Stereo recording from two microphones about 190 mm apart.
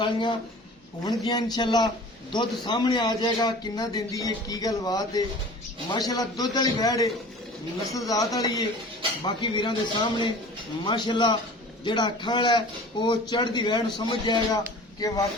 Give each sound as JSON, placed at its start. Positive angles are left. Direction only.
{"t": 0.0, "sound": "a man's voice", "side_deg": 25}